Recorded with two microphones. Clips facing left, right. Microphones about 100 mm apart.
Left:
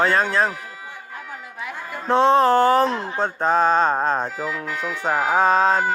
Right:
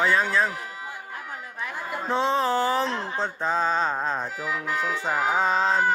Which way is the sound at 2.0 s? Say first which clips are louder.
Left 8 dB; 60° left (ahead or behind).